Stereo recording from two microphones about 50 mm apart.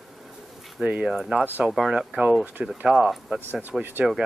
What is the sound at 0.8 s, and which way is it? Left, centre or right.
Speech, right.